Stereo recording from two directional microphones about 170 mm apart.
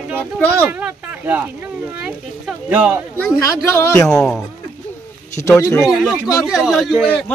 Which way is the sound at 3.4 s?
15° left (ahead or behind).